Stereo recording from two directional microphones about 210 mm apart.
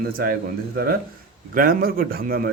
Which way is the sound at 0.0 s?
45° right (ahead or behind).